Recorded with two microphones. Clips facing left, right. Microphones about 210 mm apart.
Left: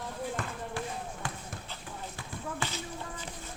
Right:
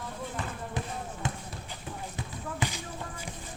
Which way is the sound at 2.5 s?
15° right (ahead or behind).